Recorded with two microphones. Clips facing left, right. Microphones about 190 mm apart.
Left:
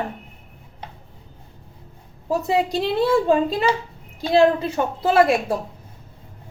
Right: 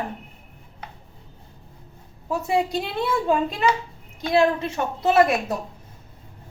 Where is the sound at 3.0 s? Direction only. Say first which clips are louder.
Left 4 dB; 30° left (ahead or behind).